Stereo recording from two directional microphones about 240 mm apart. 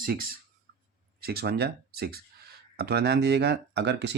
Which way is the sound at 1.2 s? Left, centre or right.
Right.